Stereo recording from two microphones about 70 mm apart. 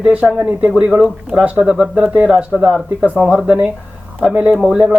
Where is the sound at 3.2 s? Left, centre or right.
Centre.